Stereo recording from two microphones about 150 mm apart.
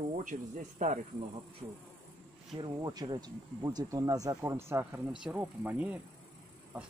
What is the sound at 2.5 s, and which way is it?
Speech, 30° right (ahead or behind).